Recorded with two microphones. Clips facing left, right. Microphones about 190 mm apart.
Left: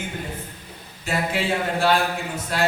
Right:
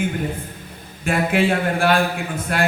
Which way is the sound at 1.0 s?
55° right (ahead or behind).